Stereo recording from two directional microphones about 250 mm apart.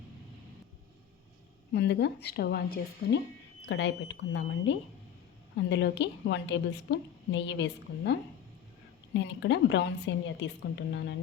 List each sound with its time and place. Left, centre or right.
1.7 s a woman's voice: left
9.1 s a woman's voice: left